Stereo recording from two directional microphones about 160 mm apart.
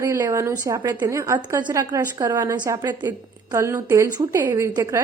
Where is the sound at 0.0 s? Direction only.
20° right (ahead or behind).